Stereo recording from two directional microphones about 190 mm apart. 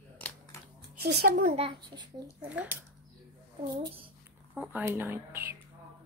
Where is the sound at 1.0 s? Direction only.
55° right (ahead or behind).